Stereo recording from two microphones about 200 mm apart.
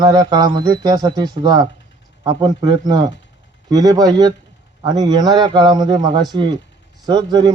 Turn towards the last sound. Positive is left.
turn(degrees=-20)  # may be behind; listen again after turning